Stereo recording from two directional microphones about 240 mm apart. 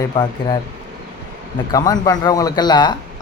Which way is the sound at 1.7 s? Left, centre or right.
Centre.